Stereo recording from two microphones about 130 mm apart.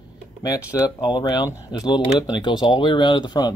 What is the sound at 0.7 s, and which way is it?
Speech, 30° left (ahead or behind).